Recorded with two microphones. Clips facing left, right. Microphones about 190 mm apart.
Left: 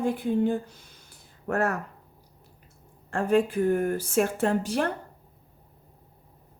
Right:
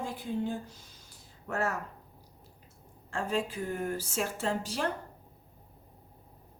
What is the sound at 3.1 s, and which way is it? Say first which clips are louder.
A woman's voice: left 9 dB; 55° left (ahead or behind).